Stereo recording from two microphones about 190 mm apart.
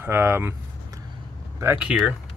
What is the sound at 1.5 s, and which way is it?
Speech, 10° right (ahead or behind).